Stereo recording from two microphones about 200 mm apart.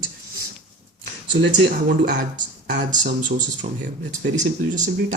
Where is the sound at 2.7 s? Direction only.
40° right (ahead or behind).